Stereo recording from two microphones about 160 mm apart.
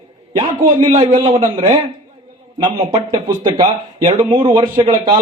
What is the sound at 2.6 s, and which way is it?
A man's voice, 35° right (ahead or behind).